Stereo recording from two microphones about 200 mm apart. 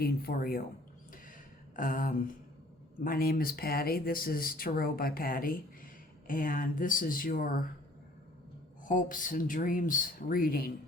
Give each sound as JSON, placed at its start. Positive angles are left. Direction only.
{"t": 0.0, "sound": "speech", "side_deg": 50}
{"t": 1.7, "sound": "speech", "side_deg": 45}
{"t": 8.8, "sound": "speech", "side_deg": 40}